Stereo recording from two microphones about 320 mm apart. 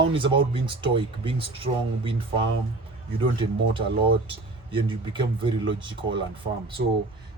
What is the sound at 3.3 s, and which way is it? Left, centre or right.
Speech, centre.